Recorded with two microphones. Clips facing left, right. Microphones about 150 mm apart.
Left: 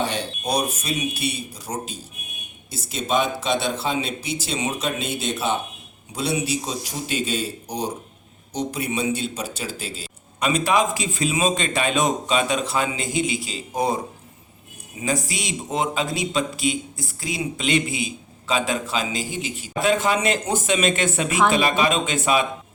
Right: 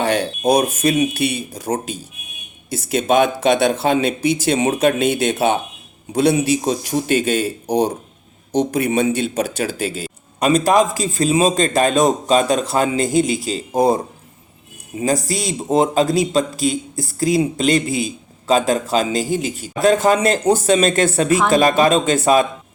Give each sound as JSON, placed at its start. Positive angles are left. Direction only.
{"t": 0.0, "sound": "speech", "side_deg": -60}
{"t": 10.5, "sound": "a man's voice", "side_deg": -35}
{"t": 15.0, "sound": "a man's voice", "side_deg": -35}